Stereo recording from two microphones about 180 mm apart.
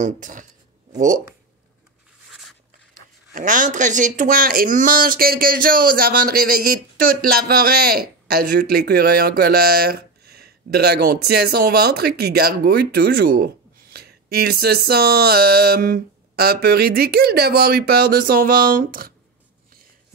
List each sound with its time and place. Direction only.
0.0 s speech: 45° right (ahead or behind)
3.3 s speech: 45° right (ahead or behind)